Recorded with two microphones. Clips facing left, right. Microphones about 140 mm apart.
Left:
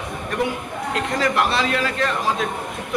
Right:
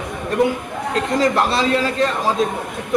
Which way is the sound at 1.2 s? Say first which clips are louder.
Right 2 dB; 30° right (ahead or behind).